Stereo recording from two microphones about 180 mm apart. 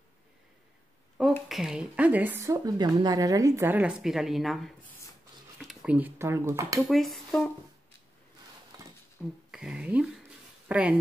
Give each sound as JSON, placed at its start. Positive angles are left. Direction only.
{"t": 1.3, "sound": "speech", "side_deg": 0}
{"t": 6.9, "sound": "speech", "side_deg": 0}
{"t": 8.7, "sound": "dishes", "side_deg": -20}
{"t": 9.5, "sound": "speech", "side_deg": 0}